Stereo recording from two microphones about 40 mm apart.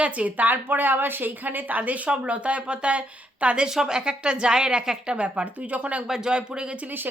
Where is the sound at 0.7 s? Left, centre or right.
Right.